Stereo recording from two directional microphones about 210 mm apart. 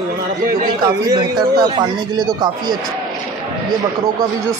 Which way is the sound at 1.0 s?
20° right (ahead or behind).